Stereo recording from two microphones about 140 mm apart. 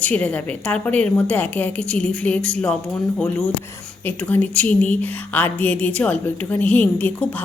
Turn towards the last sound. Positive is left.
turn(degrees=10)  # may be behind; listen again after turning